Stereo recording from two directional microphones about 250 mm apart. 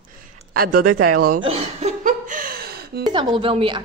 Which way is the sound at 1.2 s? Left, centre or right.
Right.